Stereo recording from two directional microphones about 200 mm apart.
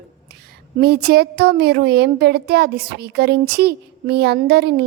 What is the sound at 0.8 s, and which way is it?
Speech, 55° right (ahead or behind).